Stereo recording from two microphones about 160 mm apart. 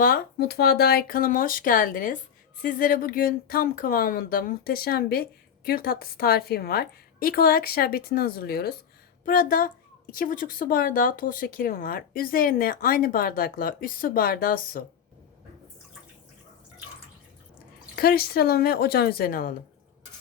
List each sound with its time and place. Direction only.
0.0 s speech: 70° left (ahead or behind)
9.2 s speech: 60° left (ahead or behind)
17.9 s speech: 70° left (ahead or behind)